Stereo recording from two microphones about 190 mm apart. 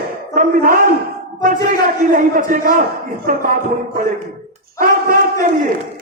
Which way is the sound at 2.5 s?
45° right (ahead or behind).